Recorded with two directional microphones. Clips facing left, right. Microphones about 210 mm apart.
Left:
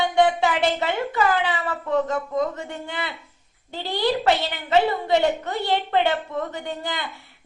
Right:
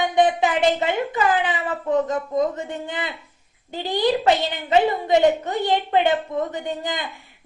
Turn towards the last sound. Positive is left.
turn(degrees=-20)  # may be behind; listen again after turning